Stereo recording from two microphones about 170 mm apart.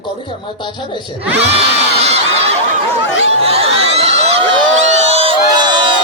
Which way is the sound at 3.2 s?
35° right (ahead or behind).